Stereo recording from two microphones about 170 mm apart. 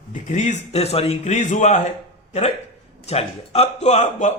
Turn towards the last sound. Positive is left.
turn(degrees=40)  # may be behind; listen again after turning